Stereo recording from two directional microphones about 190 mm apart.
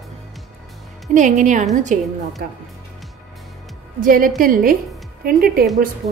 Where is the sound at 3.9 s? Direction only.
45° right (ahead or behind).